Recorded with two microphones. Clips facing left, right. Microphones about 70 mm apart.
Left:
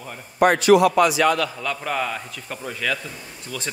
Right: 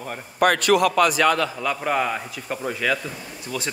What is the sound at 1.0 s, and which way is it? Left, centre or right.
Speech, right.